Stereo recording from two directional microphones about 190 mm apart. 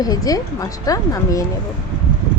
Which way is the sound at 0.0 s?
20° left (ahead or behind).